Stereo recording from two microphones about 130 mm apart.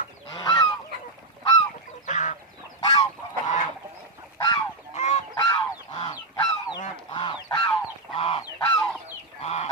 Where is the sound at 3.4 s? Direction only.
70° left (ahead or behind).